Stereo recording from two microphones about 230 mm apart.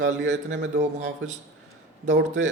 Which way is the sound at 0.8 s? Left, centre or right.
Right.